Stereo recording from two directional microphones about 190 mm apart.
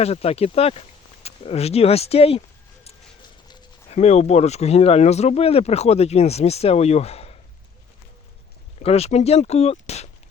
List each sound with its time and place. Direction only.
0.0 s speech: 30° left (ahead or behind)
3.5 s speech: 35° left (ahead or behind)
8.8 s speech: 35° left (ahead or behind)